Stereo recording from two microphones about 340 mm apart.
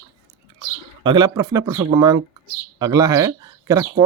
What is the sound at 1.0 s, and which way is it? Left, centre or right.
Speech, centre.